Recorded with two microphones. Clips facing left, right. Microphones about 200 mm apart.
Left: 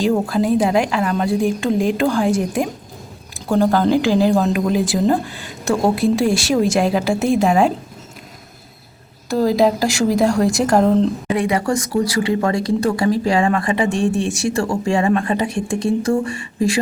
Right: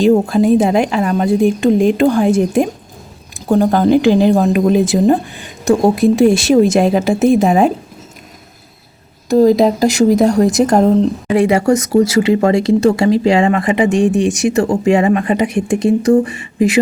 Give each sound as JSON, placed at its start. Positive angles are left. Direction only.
{"t": 0.0, "sound": "speech", "side_deg": -25}
{"t": 9.3, "sound": "speech", "side_deg": -20}